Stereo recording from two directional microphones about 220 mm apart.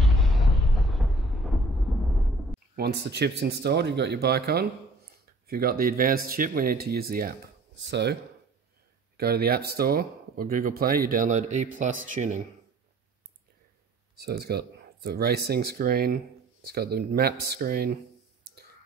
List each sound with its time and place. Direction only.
0.0 s a sound: centre (ahead or behind)
2.7 s speech: 45° right (ahead or behind)
14.2 s speech: 45° right (ahead or behind)